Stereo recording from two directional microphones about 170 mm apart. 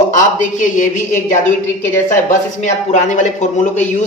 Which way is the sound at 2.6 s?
45° left (ahead or behind).